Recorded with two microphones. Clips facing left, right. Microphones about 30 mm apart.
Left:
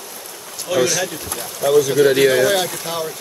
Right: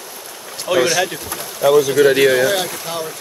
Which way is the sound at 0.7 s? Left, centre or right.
Right.